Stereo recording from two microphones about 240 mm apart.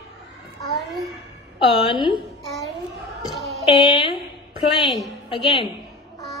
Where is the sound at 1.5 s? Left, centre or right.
Left.